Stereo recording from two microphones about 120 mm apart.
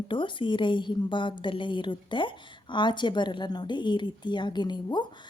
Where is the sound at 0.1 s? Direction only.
45° left (ahead or behind).